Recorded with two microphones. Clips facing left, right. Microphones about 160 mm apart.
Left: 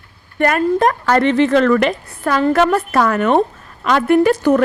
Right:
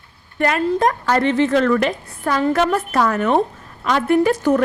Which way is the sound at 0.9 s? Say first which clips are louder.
Left 3 dB; 75° left (ahead or behind).